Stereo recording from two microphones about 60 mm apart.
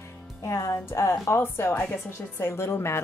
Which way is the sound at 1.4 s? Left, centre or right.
Left.